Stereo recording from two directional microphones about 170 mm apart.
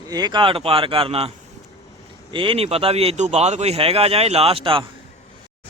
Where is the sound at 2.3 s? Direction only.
30° right (ahead or behind).